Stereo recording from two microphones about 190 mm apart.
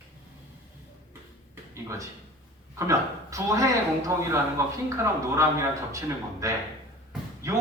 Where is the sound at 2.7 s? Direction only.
15° right (ahead or behind).